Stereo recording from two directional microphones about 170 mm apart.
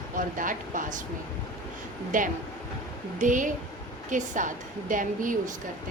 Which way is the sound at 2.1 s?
50° right (ahead or behind).